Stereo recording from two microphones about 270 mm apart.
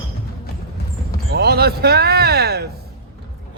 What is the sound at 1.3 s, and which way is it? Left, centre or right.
Speech, right.